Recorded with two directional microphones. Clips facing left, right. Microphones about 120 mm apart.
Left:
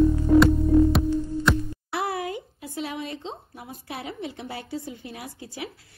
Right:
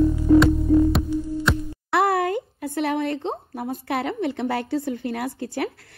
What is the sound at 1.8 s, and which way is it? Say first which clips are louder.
A woman's voice: right 10 dB; 60° right (ahead or behind).